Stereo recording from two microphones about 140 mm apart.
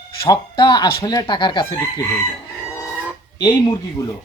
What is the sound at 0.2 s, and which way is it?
Speech, 35° left (ahead or behind).